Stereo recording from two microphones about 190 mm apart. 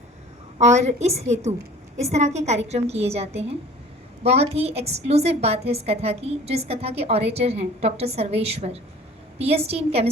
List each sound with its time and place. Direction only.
0.7 s a woman's voice: 35° right (ahead or behind)